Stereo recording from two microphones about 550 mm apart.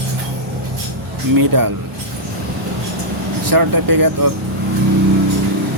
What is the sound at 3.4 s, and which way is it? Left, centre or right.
Speech, right.